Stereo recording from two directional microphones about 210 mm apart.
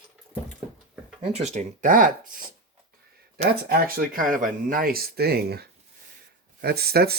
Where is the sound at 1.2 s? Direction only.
30° right (ahead or behind).